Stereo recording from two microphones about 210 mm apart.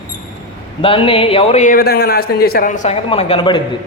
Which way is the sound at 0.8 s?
25° left (ahead or behind).